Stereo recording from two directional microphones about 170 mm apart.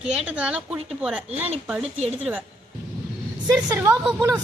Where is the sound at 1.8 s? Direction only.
35° right (ahead or behind).